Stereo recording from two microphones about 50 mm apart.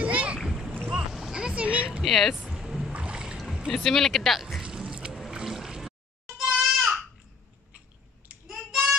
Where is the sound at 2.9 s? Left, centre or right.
Right.